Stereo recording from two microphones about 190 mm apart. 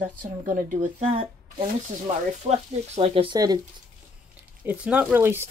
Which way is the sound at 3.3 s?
20° right (ahead or behind).